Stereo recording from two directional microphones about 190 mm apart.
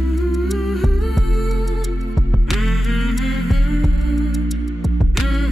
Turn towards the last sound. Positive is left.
turn(degrees=0)  # may be behind; listen again after turning